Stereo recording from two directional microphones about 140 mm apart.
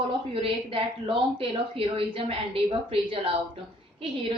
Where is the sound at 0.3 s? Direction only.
40° right (ahead or behind).